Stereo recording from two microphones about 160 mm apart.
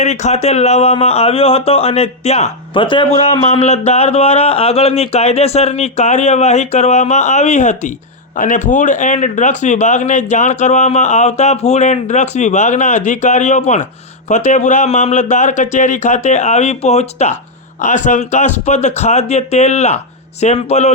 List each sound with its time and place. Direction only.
0.0 s speech: 45° left (ahead or behind)